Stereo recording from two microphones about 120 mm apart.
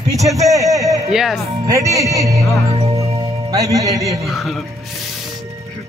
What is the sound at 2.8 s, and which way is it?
Music, 55° right (ahead or behind).